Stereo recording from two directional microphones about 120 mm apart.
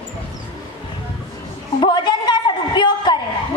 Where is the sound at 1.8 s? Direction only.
40° left (ahead or behind).